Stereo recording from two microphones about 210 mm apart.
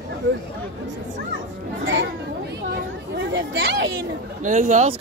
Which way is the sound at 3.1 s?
60° right (ahead or behind).